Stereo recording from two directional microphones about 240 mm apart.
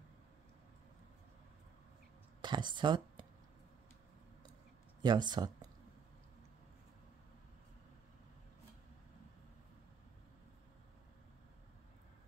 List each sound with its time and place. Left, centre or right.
2.4 s speech: centre
5.0 s speech: centre